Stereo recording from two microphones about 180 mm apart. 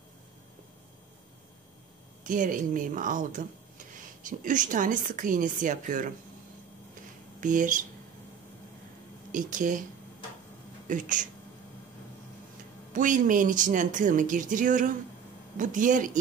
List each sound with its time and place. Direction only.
2.2 s speech: 45° right (ahead or behind)
7.3 s speech: 45° right (ahead or behind)
9.3 s speech: 45° right (ahead or behind)
10.9 s speech: 45° right (ahead or behind)
12.9 s speech: 45° right (ahead or behind)